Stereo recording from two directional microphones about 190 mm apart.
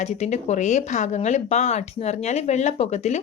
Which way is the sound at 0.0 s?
35° left (ahead or behind).